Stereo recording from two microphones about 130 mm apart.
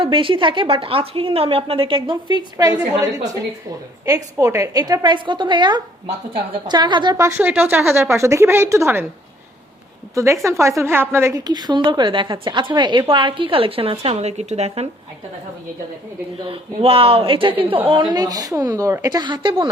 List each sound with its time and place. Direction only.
0.0 s a woman's voice: 40° right (ahead or behind)
2.0 s a woman's voice: 35° right (ahead or behind)
4.1 s a woman's voice: 25° right (ahead or behind)
7.2 s speech: 20° right (ahead or behind)
10.4 s speech: 25° right (ahead or behind)
11.3 s a woman's voice: 30° right (ahead or behind); by 14.8 s 55° right (ahead or behind)
16.5 s a woman's voice: 45° right (ahead or behind)